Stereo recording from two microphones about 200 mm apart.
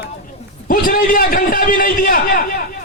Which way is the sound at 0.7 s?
45° left (ahead or behind).